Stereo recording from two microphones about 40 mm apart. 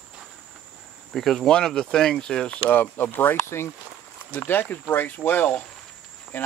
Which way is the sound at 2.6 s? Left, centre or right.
Left.